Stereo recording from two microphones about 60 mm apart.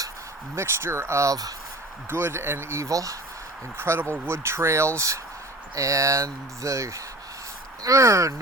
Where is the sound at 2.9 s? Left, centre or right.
Right.